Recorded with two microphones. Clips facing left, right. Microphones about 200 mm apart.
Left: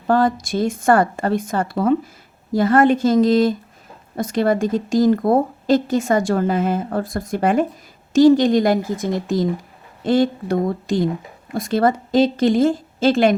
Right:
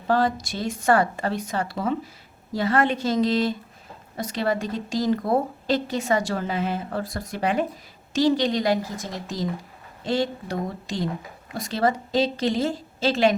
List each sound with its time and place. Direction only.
0.1 s a woman's voice: 50° left (ahead or behind)